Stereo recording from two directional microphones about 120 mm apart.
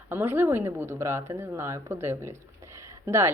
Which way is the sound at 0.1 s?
15° right (ahead or behind).